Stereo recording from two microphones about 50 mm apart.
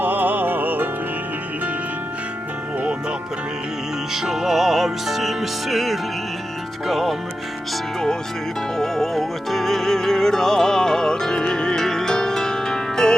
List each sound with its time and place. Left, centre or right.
0.0 s music: right
4.1 s music: centre
6.8 s speech: centre
8.8 s music: centre